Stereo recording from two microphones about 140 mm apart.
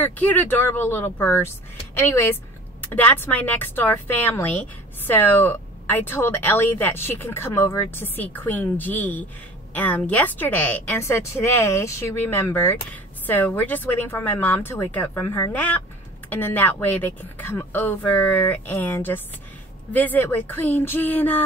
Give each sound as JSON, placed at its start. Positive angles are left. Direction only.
{"t": 0.0, "sound": "speech", "side_deg": 10}